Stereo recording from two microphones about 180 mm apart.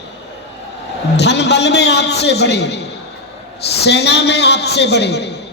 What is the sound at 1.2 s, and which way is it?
A woman's voice, 70° left (ahead or behind).